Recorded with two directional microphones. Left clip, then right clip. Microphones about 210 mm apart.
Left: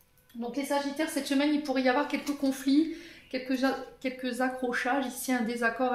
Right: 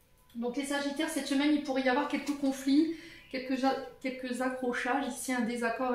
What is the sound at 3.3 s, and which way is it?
A woman's voice, 45° left (ahead or behind).